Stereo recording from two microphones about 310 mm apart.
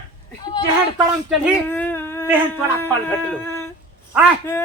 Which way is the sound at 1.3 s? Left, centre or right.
Centre.